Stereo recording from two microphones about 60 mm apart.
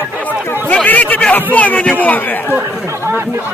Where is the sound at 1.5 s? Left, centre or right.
Left.